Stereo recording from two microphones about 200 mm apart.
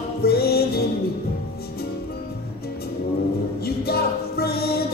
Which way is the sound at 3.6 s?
50° left (ahead or behind).